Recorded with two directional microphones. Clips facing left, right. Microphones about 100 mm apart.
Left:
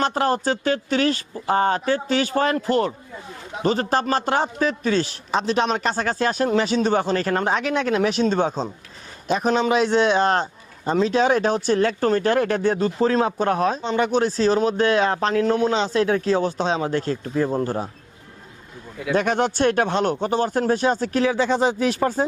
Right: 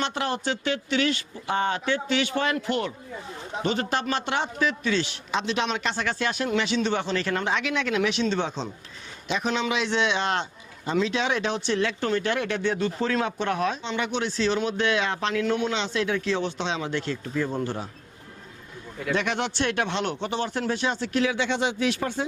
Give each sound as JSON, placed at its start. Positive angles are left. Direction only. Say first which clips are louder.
{"t": 0.0, "sound": "a man's voice", "louder": "left 7 dB", "side_deg": 40}
{"t": 19.1, "sound": "speech", "louder": "left 6 dB", "side_deg": 40}